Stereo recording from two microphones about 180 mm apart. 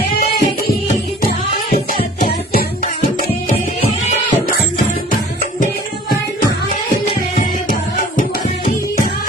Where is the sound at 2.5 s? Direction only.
50° left (ahead or behind).